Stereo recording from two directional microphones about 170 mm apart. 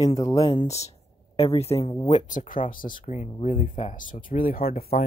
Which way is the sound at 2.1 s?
50° left (ahead or behind).